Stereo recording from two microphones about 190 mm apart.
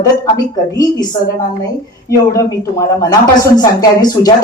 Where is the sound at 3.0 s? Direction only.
20° left (ahead or behind).